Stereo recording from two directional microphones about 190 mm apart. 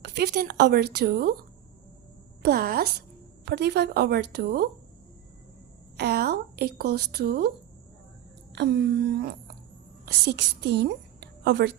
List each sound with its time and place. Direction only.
0.0 s speech: 60° right (ahead or behind)
2.4 s speech: 55° right (ahead or behind)
6.0 s speech: 60° right (ahead or behind)
8.5 s a woman's voice: 65° right (ahead or behind)